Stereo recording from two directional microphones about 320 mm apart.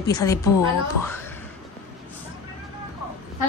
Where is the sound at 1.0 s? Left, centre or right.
Centre.